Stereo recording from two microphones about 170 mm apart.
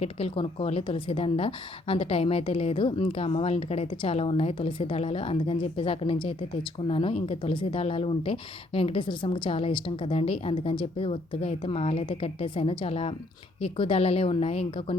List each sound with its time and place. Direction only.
0.0 s a woman's voice: 35° left (ahead or behind)